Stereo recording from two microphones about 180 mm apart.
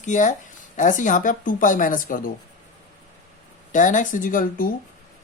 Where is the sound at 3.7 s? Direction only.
45° left (ahead or behind).